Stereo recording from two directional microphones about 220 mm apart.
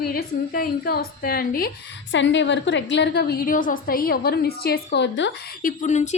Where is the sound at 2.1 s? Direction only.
55° left (ahead or behind).